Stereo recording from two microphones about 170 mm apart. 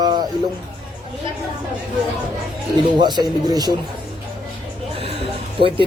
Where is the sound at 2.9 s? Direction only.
25° right (ahead or behind).